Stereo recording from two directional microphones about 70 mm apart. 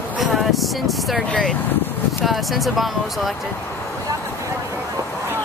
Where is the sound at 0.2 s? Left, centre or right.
Centre.